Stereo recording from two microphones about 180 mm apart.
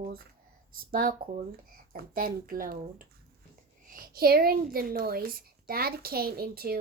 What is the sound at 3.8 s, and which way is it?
A woman's voice, 55° right (ahead or behind).